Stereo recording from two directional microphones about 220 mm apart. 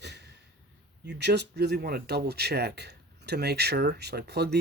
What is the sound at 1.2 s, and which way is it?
Speech, 50° right (ahead or behind).